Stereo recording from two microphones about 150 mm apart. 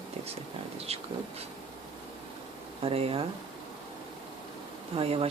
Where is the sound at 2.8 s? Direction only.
40° right (ahead or behind).